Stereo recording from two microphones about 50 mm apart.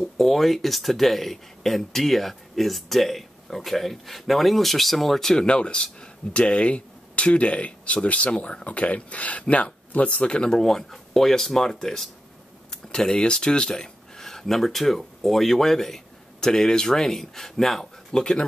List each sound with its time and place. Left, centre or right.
0.2 s speech: centre
18.2 s speech: centre